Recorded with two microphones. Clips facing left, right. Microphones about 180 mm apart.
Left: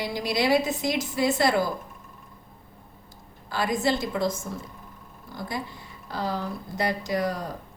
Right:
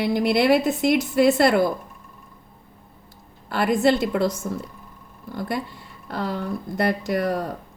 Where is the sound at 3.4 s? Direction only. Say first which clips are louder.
Right 6 dB; 60° right (ahead or behind).